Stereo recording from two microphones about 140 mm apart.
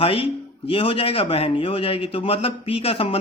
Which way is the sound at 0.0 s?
40° left (ahead or behind).